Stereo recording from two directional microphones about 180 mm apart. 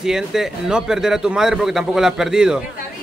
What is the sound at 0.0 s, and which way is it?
A man's voice, 5° right (ahead or behind).